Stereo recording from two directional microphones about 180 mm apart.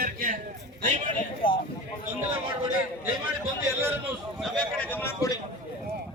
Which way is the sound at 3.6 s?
15° right (ahead or behind).